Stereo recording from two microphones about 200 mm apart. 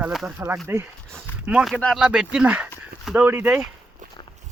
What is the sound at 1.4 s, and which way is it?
Speech, 5° right (ahead or behind).